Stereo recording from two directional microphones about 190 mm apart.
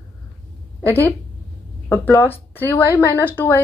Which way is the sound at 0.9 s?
15° left (ahead or behind).